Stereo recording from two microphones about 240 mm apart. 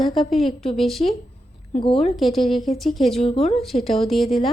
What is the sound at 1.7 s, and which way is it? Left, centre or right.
Speech, left.